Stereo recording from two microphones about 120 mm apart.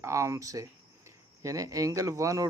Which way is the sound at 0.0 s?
25° right (ahead or behind).